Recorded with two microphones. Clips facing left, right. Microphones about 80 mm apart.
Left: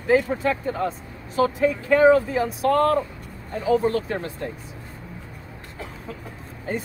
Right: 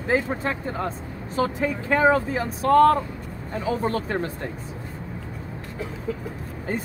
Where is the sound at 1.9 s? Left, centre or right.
Right.